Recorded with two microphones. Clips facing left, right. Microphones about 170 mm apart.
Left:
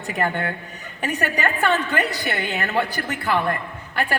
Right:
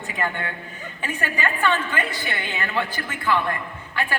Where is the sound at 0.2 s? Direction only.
45° left (ahead or behind).